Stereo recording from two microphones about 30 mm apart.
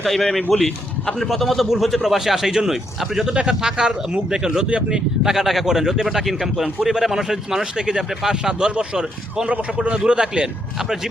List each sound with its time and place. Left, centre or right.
0.0 s a man's voice: centre
1.3 s a man's voice: centre
3.3 s speech: right
5.4 s a man's voice: centre
7.6 s speech: right
8.5 s speech: right
9.5 s a man's voice: right
10.8 s speech: centre